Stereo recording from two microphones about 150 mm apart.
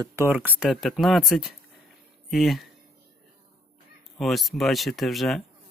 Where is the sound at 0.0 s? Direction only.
15° right (ahead or behind); by 2.6 s centre (ahead or behind).